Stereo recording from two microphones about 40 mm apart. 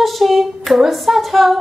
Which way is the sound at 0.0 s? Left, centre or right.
Centre.